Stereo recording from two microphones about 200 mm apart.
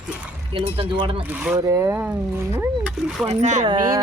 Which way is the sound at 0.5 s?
30° right (ahead or behind).